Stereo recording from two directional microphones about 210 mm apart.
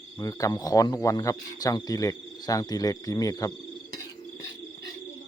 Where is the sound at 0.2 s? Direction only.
15° left (ahead or behind).